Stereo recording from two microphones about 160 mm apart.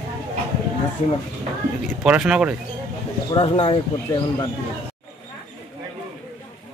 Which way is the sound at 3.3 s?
35° left (ahead or behind).